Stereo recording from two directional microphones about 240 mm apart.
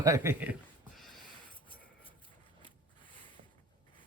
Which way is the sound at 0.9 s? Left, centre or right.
Centre.